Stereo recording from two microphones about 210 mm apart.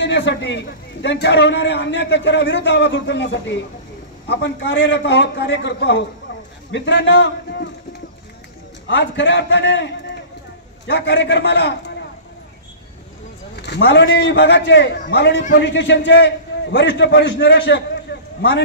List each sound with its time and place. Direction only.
0.0 s a man's voice: 55° left (ahead or behind)
8.8 s a man's voice: 60° left (ahead or behind)
10.9 s a man's voice: 55° left (ahead or behind)
13.6 s a man's voice: 55° left (ahead or behind)